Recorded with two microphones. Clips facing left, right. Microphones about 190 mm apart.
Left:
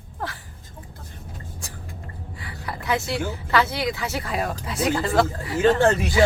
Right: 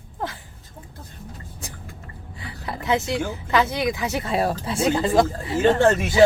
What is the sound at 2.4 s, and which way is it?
A woman's voice, 20° right (ahead or behind).